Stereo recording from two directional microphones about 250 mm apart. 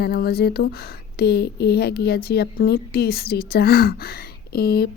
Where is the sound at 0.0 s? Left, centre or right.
Left.